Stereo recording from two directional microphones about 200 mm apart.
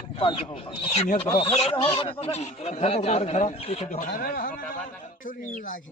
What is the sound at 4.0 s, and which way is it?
Speech, 45° left (ahead or behind).